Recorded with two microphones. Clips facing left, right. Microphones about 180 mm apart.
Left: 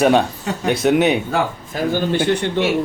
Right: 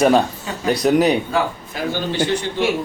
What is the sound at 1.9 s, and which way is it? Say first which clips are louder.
Speech: left 3 dB; 60° left (ahead or behind).